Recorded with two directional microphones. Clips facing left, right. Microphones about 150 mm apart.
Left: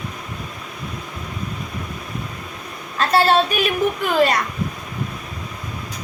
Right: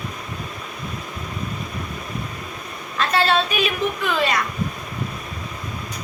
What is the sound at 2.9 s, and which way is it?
A woman's voice, 40° left (ahead or behind).